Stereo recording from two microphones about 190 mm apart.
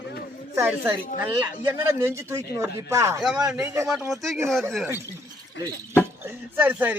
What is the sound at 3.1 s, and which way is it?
Speech, centre (ahead or behind).